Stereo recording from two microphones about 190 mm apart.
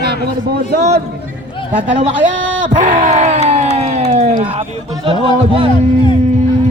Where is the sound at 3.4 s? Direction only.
35° right (ahead or behind).